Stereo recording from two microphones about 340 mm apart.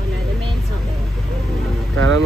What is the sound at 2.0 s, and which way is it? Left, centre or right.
Vehicle, right.